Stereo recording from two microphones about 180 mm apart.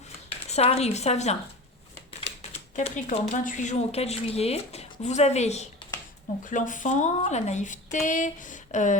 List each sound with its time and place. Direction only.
0.3 s speech: 35° left (ahead or behind)